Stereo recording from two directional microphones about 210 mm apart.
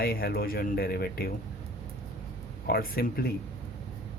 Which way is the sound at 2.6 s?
45° left (ahead or behind).